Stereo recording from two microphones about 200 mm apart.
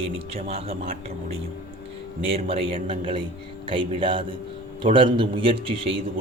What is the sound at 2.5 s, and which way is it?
A man's voice, 25° right (ahead or behind).